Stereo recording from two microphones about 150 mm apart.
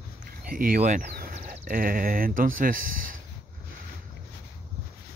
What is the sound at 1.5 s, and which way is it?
Speech, 70° right (ahead or behind).